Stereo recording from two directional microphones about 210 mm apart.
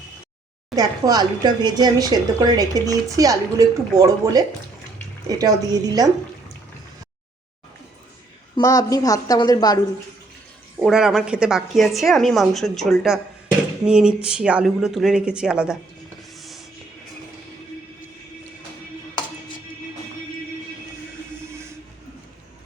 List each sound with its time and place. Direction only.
0.8 s speech: 15° right (ahead or behind)
8.5 s a woman's voice: 20° left (ahead or behind)
10.8 s a woman's voice: 5° right (ahead or behind)
16.4 s music: centre (ahead or behind)